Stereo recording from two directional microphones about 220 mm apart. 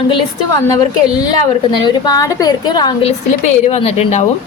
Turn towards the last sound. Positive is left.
turn(degrees=30)  # may be behind; listen again after turning